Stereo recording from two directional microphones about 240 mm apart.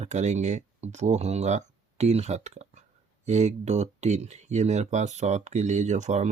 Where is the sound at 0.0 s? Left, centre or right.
Right.